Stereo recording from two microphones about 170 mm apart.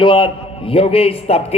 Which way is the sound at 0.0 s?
30° left (ahead or behind).